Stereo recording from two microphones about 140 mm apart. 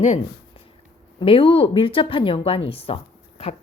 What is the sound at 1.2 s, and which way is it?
Speech, 35° left (ahead or behind).